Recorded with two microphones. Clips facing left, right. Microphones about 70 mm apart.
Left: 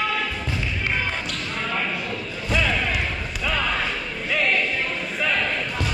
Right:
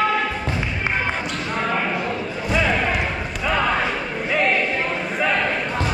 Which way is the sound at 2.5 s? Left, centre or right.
Centre.